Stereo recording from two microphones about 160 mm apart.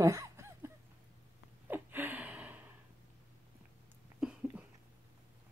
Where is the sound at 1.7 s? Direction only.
10° right (ahead or behind).